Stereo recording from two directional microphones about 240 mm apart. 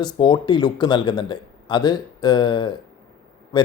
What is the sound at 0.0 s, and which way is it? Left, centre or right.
Speech, centre.